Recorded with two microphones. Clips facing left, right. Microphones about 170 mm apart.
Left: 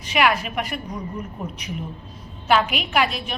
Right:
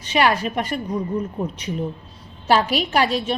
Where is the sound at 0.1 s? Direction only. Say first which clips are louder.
Right 2 dB; 35° right (ahead or behind).